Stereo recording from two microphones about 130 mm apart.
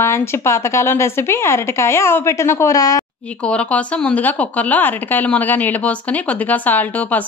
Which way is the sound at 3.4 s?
10° left (ahead or behind).